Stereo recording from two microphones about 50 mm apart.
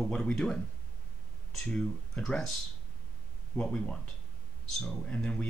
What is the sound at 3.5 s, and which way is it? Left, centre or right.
Speech, centre.